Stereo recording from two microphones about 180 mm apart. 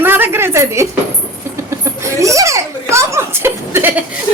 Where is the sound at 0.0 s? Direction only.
10° right (ahead or behind).